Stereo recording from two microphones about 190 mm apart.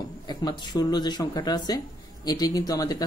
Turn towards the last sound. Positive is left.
turn(degrees=20)  # may be behind; listen again after turning